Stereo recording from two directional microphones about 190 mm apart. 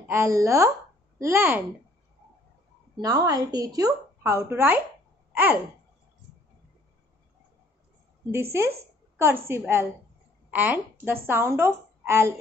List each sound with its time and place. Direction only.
0.1 s a woman's voice: 15° right (ahead or behind)
3.0 s a woman's voice: 20° right (ahead or behind)
5.3 s a sound: 10° right (ahead or behind)
8.3 s a woman's voice: 15° right (ahead or behind)